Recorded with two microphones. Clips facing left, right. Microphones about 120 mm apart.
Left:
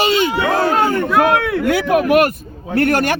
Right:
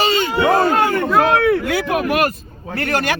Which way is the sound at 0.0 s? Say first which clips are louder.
Left 2 dB; 65° left (ahead or behind).